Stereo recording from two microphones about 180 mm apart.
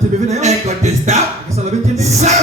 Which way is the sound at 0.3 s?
40° right (ahead or behind).